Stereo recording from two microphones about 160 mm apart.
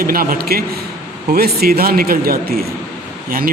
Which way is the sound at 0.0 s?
65° right (ahead or behind).